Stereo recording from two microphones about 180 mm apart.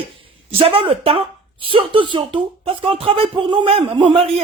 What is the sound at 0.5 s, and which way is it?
Speech, 30° right (ahead or behind).